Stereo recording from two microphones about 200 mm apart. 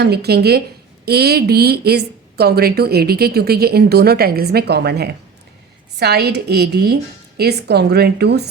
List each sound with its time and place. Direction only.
0.0 s a woman's voice: 55° right (ahead or behind)